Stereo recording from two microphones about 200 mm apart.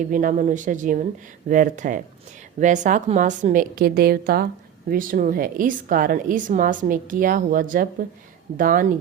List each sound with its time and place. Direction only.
0.1 s a woman's voice: 40° right (ahead or behind)